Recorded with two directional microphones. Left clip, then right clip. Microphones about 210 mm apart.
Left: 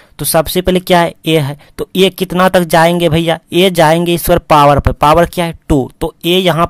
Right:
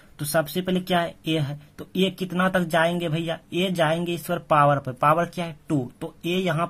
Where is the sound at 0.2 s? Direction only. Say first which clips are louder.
Left 12 dB; 45° left (ahead or behind).